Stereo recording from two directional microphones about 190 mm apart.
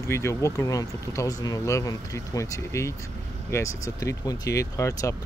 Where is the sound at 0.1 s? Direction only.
15° left (ahead or behind).